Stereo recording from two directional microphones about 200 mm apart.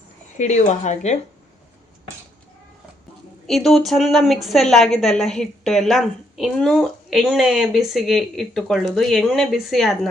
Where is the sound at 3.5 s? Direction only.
Centre (ahead or behind).